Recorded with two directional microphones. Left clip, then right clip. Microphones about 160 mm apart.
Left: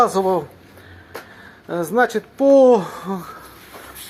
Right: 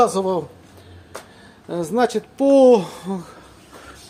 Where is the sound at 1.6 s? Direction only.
10° right (ahead or behind).